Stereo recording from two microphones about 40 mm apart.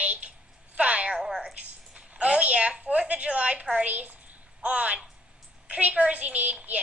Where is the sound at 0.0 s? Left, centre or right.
Right.